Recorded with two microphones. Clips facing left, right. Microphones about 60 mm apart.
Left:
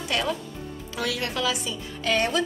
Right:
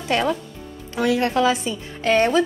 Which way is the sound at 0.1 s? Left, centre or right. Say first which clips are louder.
Right 6 dB; right.